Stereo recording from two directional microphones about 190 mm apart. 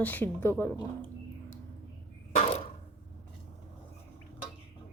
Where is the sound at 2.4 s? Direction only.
30° left (ahead or behind).